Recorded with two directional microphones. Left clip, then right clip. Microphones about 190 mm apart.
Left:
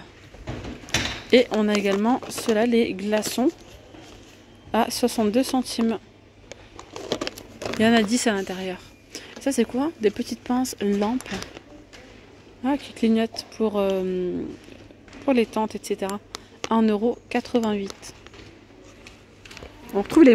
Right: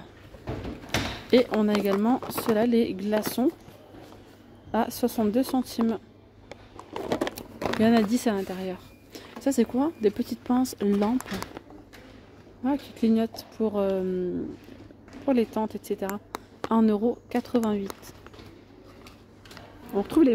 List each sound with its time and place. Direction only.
0.8 s speech: 5° right (ahead or behind)
4.6 s speech: centre (ahead or behind)
6.5 s a sound: 25° right (ahead or behind)
7.8 s speech: centre (ahead or behind)
12.6 s speech: centre (ahead or behind)
19.9 s speech: 5° left (ahead or behind)